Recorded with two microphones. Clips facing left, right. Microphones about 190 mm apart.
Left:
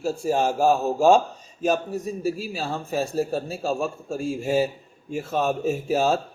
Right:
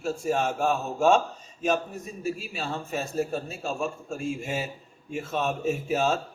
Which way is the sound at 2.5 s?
35° left (ahead or behind).